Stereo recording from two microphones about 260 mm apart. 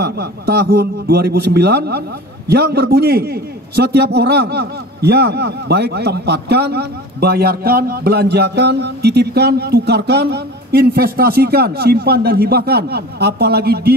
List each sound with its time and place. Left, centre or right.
0.0 s a man's voice: right